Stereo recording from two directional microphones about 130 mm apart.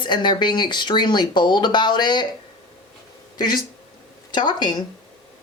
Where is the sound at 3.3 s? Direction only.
35° left (ahead or behind).